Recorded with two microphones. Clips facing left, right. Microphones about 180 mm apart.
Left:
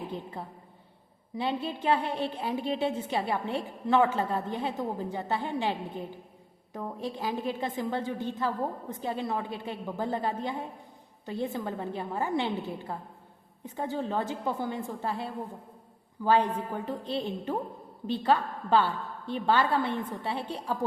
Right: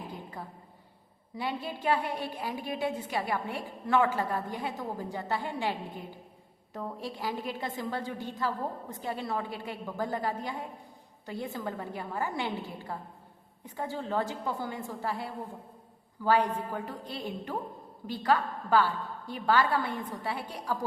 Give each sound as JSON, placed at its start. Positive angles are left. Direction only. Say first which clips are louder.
{"t": 1.4, "sound": "a woman's voice", "louder": "left 4 dB", "side_deg": 25}
{"t": 13.7, "sound": "a woman's voice", "louder": "left 3 dB", "side_deg": 20}